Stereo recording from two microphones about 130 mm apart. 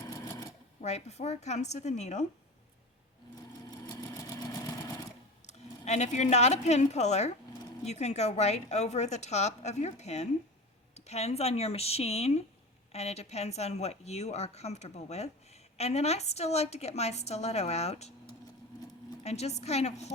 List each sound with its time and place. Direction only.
0.1 s sewing machine: 30° left (ahead or behind)
0.8 s a woman's voice: 60° left (ahead or behind)
3.7 s sewing machine: 30° left (ahead or behind)
5.5 s a woman's voice: 60° left (ahead or behind)
19.2 s a woman's voice: 55° left (ahead or behind)